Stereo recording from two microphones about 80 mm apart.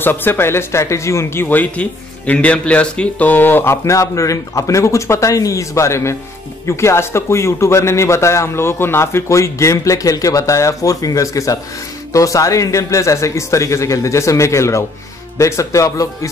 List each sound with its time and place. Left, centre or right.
0.0 s speech: left